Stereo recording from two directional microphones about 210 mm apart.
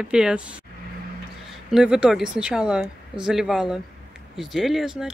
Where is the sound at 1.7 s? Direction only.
Centre (ahead or behind).